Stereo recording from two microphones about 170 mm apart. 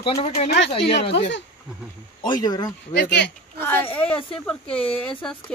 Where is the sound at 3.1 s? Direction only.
90° left.